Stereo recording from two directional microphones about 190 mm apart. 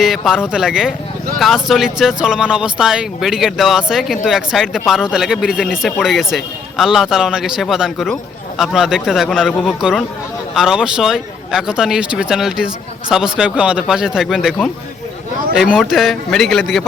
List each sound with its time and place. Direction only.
0.0 s a man's voice: centre (ahead or behind)